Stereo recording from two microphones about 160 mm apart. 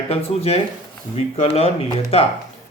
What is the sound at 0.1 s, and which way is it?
Speech, 40° left (ahead or behind).